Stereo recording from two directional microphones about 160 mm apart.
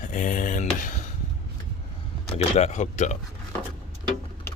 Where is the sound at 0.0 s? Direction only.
55° left (ahead or behind).